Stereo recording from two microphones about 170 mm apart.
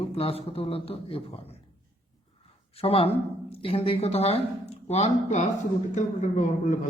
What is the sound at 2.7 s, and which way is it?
A man's voice, 35° left (ahead or behind).